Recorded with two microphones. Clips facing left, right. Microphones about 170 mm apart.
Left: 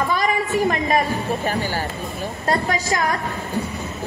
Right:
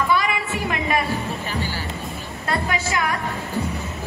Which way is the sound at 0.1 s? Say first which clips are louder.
Left 2 dB; 40° left (ahead or behind).